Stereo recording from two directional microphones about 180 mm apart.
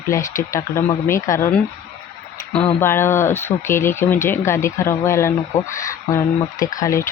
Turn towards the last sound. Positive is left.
turn(degrees=15)  # may be behind; listen again after turning